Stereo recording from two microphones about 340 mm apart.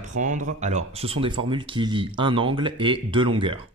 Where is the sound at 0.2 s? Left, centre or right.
Right.